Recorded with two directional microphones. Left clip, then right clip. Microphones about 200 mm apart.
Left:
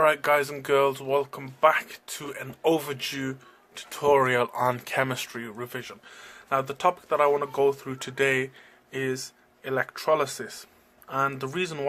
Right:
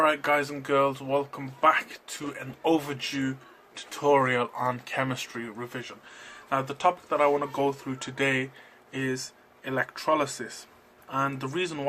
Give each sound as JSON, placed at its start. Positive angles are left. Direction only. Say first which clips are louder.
{"t": 0.0, "sound": "speech", "louder": "left 2 dB", "side_deg": 50}